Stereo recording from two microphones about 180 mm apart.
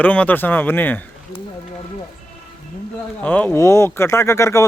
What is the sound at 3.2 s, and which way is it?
A man's voice, 10° left (ahead or behind).